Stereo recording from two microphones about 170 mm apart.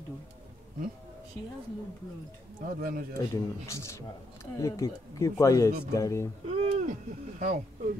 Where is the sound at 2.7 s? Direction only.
55° right (ahead or behind).